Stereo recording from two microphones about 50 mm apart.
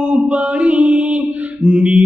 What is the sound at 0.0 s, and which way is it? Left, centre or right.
Mantra, right.